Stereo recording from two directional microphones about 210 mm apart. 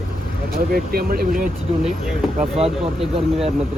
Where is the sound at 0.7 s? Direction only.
45° right (ahead or behind).